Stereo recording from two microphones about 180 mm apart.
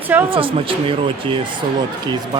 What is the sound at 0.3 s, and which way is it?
Speech, 30° right (ahead or behind).